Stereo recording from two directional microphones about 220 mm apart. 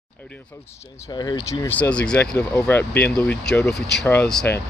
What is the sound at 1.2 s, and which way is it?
Speech, 15° left (ahead or behind).